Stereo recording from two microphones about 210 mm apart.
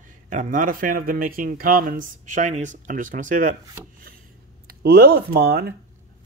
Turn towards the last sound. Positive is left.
turn(degrees=-50)  # may be behind; listen again after turning